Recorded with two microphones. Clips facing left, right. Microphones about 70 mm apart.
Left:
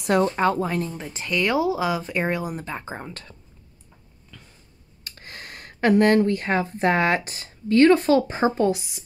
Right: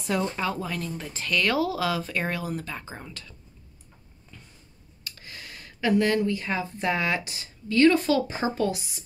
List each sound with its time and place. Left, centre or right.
0.2 s speech: left
2.8 s speech: left
5.0 s speech: left